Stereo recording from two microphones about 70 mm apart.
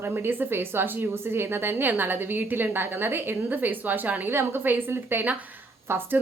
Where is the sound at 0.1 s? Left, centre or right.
Right.